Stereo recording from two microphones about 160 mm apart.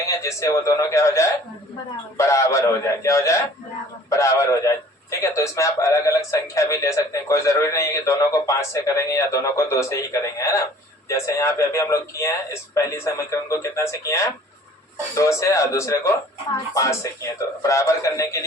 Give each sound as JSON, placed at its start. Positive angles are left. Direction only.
{"t": 0.2, "sound": "speech", "side_deg": 20}